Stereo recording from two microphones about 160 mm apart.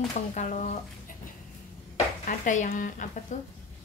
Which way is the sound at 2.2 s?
50° left (ahead or behind).